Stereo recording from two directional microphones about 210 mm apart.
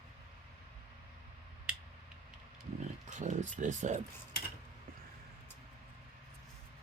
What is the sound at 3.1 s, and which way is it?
Speech, 35° right (ahead or behind).